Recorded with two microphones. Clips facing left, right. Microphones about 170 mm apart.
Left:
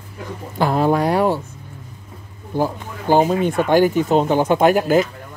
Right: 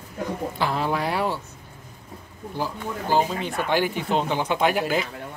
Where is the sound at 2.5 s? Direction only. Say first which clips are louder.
Left 7 dB; 50° left (ahead or behind).